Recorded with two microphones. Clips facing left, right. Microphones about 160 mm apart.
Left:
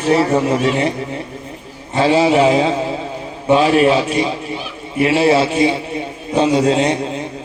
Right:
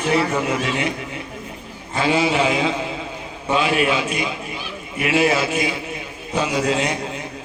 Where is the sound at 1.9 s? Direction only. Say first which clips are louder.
Left 6 dB; 35° left (ahead or behind).